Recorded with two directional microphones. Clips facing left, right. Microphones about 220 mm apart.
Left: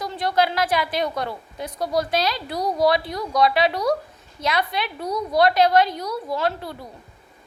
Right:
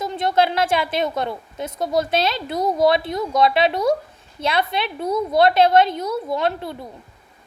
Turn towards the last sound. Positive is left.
turn(degrees=-20)  # may be behind; listen again after turning